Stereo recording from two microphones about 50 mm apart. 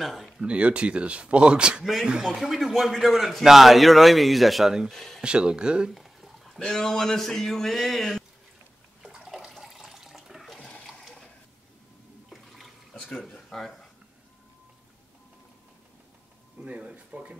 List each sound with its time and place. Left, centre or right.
0.0 s a man's voice: centre
0.4 s a man's voice: right
2.3 s a man's voice: centre
4.9 s a sound: centre
5.2 s a man's voice: centre
5.9 s a sound: centre
6.6 s a man's voice: centre
9.0 s bathtub: centre
9.5 s water: centre
10.6 s water: left
12.3 s water: centre
13.5 s speech: centre
16.5 s speech: right